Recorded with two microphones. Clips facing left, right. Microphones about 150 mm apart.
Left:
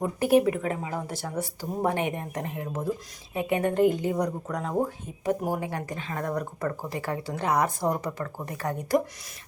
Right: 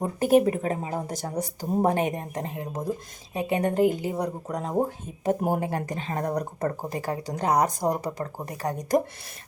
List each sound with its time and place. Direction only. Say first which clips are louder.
0.0 s speech: right 1 dB; 40° right (ahead or behind)
3.8 s a woman's voice: left 1 dB; 10° right (ahead or behind)
4.4 s speech: right 1 dB; 30° right (ahead or behind)
4.8 s speech: right 2 dB; 45° right (ahead or behind)
5.9 s speech: right 2 dB; 30° right (ahead or behind)